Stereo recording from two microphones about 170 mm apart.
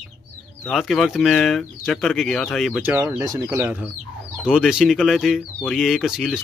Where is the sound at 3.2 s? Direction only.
20° right (ahead or behind).